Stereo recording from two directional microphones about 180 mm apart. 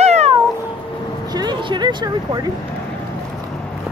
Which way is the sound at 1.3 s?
25° right (ahead or behind).